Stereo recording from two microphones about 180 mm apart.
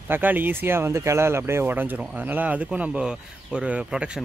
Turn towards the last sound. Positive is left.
turn(degrees=-5)  # may be behind; listen again after turning